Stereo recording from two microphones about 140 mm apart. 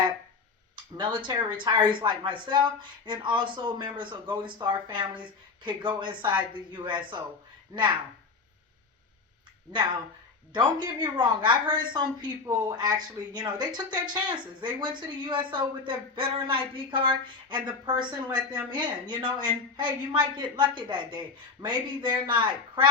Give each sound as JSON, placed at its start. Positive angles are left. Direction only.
{"t": 0.9, "sound": "a woman's voice", "side_deg": -35}
{"t": 10.5, "sound": "a woman's voice", "side_deg": -30}
{"t": 18.3, "sound": "a woman's voice", "side_deg": -5}
{"t": 18.7, "sound": "a woman's voice", "side_deg": -35}